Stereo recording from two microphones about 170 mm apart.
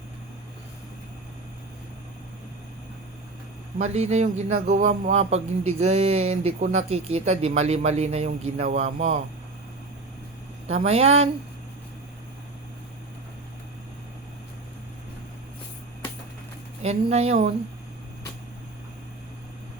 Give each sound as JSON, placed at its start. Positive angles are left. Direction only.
{"t": 3.8, "sound": "speech", "side_deg": -40}
{"t": 10.8, "sound": "speech", "side_deg": -40}
{"t": 16.8, "sound": "speech", "side_deg": -40}